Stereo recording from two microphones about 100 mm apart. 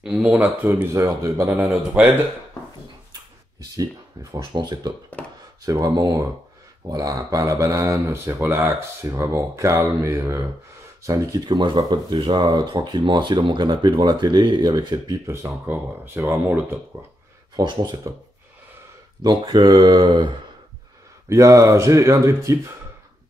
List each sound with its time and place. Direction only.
0.0 s speech: 5° right (ahead or behind)
0.9 s speech: 35° right (ahead or behind)
2.0 s speech: 15° right (ahead or behind)
3.7 s speech: 35° right (ahead or behind)
4.4 s speech: 50° right (ahead or behind); by 10.4 s 30° right (ahead or behind)
11.1 s speech: 40° right (ahead or behind)
15.2 s speech: 30° right (ahead or behind)
17.6 s speech: 50° right (ahead or behind)
19.4 s speech: 40° right (ahead or behind)
21.3 s speech: 30° right (ahead or behind)